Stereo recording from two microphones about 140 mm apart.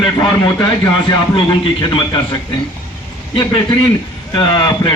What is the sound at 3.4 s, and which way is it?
A man's voice, 30° left (ahead or behind).